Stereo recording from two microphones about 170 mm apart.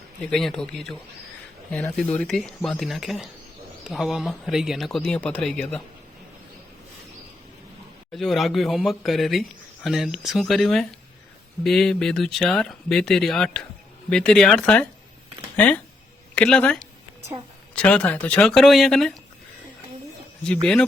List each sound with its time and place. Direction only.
0.3 s speech: centre (ahead or behind)
8.1 s speech: centre (ahead or behind)
20.4 s speech: 5° left (ahead or behind)